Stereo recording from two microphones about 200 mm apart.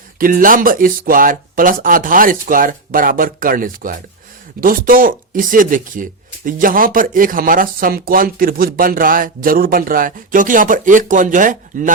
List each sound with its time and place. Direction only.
0.2 s speech: 45° right (ahead or behind)